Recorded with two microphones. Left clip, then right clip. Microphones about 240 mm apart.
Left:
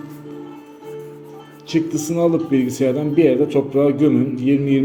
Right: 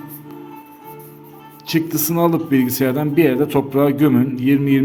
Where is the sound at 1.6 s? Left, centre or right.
Right.